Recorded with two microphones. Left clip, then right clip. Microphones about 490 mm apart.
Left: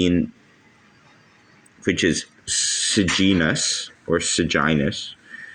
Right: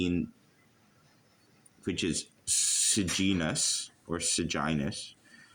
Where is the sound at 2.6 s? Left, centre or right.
Right.